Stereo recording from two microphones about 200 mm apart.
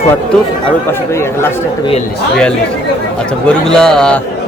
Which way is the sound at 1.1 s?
15° left (ahead or behind).